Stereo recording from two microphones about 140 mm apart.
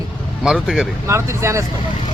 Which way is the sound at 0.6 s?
5° right (ahead or behind).